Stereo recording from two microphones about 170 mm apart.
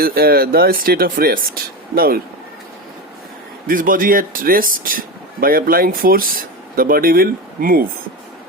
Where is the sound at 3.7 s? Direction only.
55° right (ahead or behind).